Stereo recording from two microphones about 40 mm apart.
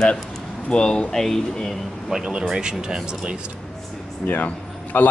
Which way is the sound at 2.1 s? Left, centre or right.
Centre.